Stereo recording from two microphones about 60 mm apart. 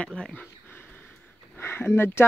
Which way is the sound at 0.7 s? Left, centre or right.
Left.